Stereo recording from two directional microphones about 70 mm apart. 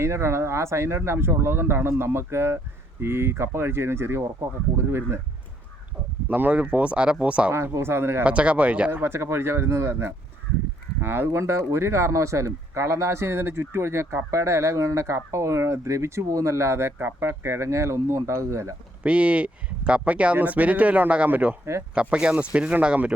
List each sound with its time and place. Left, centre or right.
0.0 s speech: right
6.2 s speech: right
7.5 s speech: right
8.2 s speech: centre
9.1 s speech: right
17.0 s speech: right
19.0 s speech: centre
21.6 s speech: right
21.9 s speech: centre